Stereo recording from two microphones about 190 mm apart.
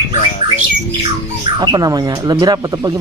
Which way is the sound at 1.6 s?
20° right (ahead or behind).